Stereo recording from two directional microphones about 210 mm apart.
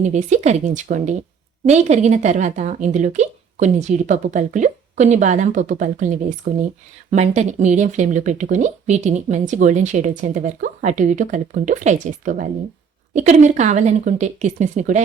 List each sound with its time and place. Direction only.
0.0 s speech: 35° right (ahead or behind)
6.5 s speech: 50° right (ahead or behind)
7.1 s speech: 30° right (ahead or behind)